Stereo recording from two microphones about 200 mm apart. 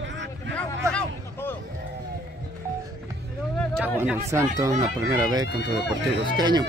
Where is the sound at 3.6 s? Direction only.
5° left (ahead or behind).